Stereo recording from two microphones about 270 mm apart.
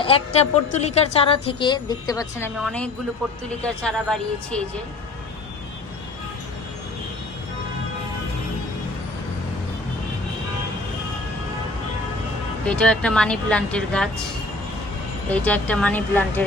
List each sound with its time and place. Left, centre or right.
0.0 s a woman's voice: left; by 4.6 s centre
12.6 s speech: centre
15.3 s speech: centre